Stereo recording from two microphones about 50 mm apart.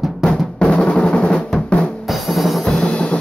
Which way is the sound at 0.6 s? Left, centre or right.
Left.